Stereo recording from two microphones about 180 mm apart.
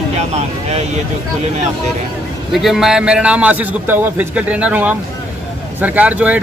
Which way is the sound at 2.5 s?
Centre (ahead or behind).